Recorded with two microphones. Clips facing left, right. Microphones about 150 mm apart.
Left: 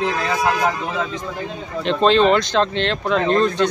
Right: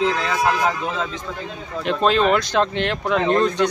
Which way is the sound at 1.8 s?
5° right (ahead or behind).